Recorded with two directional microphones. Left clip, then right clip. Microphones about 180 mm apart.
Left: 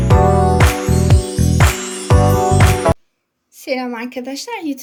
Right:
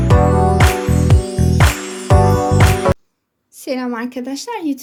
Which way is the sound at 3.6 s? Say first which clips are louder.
Even; 45° right (ahead or behind).